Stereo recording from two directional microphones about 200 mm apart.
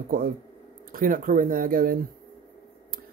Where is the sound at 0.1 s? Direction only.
45° right (ahead or behind).